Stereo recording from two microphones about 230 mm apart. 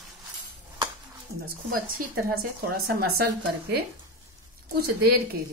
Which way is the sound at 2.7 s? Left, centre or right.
Right.